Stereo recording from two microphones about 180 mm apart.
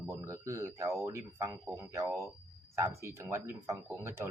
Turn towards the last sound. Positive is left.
turn(degrees=-15)  # may be behind; listen again after turning